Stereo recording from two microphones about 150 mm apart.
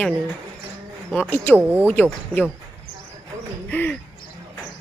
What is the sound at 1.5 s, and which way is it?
Speech, 10° right (ahead or behind).